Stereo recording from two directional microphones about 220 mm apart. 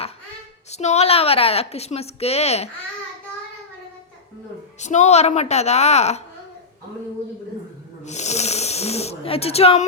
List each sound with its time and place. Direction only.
0.7 s a woman's voice: 30° left (ahead or behind)
4.8 s a woman's voice: 30° left (ahead or behind)
8.0 s speech: 30° left (ahead or behind)